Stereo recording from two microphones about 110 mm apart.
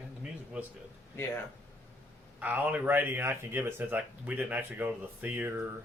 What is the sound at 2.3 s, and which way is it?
Speech, 15° right (ahead or behind).